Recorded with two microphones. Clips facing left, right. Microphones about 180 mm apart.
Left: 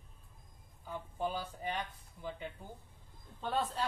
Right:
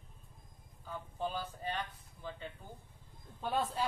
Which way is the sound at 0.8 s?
15° left (ahead or behind).